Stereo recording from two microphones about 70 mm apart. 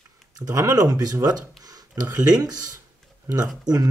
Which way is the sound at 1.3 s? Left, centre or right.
Right.